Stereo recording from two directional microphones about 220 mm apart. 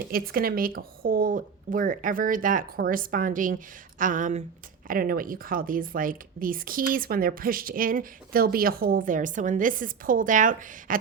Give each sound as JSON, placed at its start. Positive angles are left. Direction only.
{"t": 0.1, "sound": "speech", "side_deg": -40}